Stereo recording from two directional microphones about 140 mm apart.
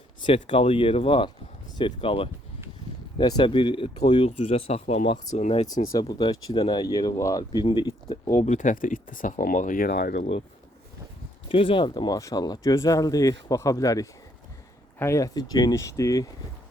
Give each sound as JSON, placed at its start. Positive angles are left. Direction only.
{"t": 0.5, "sound": "speech", "side_deg": 40}
{"t": 5.9, "sound": "speech", "side_deg": 30}
{"t": 8.3, "sound": "speech", "side_deg": 60}
{"t": 11.4, "sound": "speech", "side_deg": 40}